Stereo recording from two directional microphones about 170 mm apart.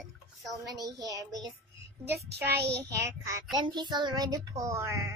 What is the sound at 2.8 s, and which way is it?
A child's voice, 20° right (ahead or behind).